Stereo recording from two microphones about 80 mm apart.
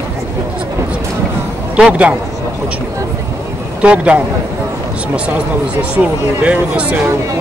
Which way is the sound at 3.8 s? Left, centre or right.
Centre.